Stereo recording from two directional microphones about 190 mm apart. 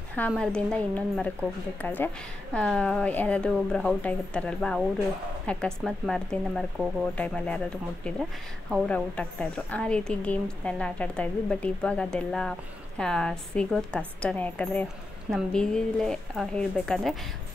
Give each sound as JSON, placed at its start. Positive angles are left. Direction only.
{"t": 0.3, "sound": "a woman's voice", "side_deg": 5}